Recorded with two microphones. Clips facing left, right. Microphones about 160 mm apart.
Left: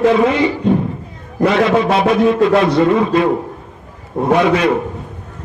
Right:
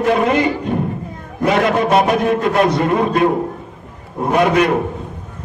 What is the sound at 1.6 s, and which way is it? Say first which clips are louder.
A man's voice: left 1 dB; 55° right (ahead or behind).